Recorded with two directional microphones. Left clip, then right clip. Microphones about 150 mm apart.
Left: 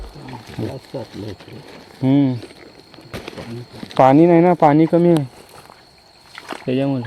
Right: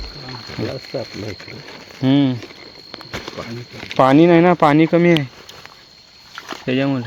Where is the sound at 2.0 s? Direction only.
5° right (ahead or behind).